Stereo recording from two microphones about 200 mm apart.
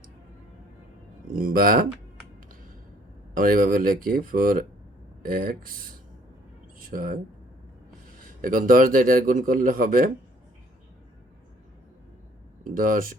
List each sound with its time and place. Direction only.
1.4 s a man's voice: 45° right (ahead or behind)
3.3 s a man's voice: 45° right (ahead or behind)
6.7 s a sound: 45° right (ahead or behind)
8.4 s a man's voice: 40° right (ahead or behind)
12.6 s a man's voice: 40° right (ahead or behind)